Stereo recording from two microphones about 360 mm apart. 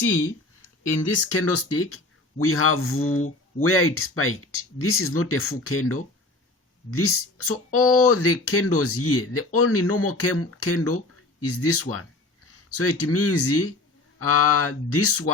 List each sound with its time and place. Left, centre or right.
0.9 s speech: left